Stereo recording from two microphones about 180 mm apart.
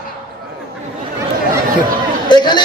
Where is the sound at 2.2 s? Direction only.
25° left (ahead or behind).